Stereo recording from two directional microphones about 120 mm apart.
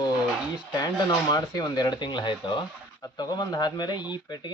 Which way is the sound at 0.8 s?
30° left (ahead or behind).